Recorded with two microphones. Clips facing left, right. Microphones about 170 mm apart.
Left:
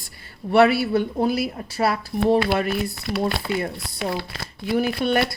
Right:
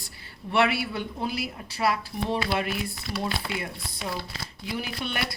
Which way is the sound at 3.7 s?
75° left (ahead or behind).